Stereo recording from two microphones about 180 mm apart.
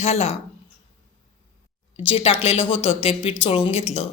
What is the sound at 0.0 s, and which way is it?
Speech, 35° left (ahead or behind).